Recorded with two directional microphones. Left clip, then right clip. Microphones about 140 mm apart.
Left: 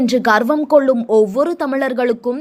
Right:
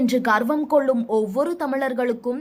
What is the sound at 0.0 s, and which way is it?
A woman's voice, 20° left (ahead or behind).